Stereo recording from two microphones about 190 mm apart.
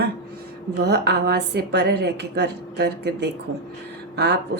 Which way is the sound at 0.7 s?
60° right (ahead or behind).